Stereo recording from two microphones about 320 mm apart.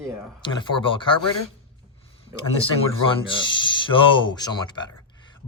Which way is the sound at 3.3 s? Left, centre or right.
Centre.